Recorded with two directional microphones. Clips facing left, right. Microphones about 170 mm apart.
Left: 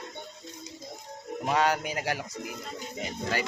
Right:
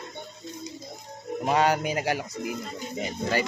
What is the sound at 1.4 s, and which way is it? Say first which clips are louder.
Speech: right 3 dB; 20° right (ahead or behind).